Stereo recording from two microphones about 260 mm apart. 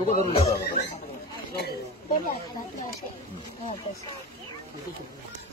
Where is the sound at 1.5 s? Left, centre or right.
Left.